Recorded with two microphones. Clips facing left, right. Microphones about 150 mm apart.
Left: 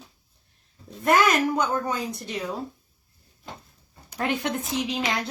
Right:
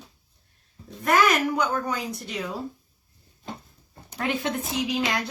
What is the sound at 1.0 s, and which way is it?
A woman's voice, 20° left (ahead or behind).